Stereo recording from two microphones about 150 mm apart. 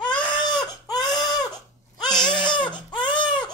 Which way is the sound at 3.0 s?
30° left (ahead or behind).